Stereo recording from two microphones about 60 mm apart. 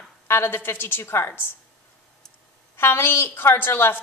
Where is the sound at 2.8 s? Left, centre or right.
Left.